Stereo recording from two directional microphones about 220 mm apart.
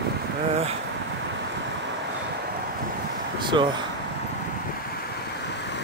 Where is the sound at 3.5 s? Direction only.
20° right (ahead or behind).